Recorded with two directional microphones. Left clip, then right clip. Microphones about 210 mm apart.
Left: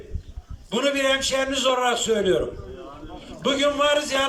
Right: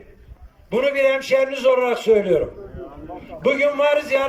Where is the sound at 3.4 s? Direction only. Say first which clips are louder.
Right 3 dB; 20° right (ahead or behind).